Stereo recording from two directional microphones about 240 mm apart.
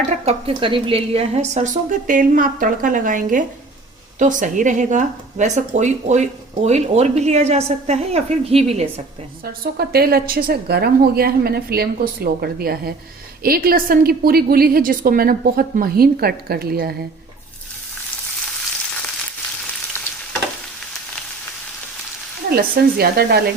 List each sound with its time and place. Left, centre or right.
0.3 s a woman's voice: right
9.4 s a woman's voice: right
22.4 s a woman's voice: right